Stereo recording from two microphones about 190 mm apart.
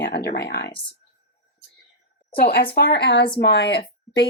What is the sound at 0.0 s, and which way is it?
Speech, 60° left (ahead or behind).